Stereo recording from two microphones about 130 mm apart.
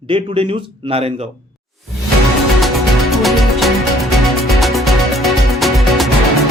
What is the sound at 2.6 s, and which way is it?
Music, centre (ahead or behind).